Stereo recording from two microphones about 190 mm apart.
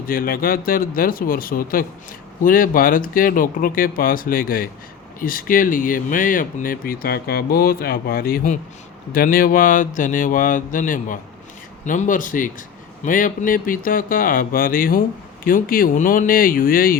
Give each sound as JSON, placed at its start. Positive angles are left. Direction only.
{"t": 0.1, "sound": "speech", "side_deg": 50}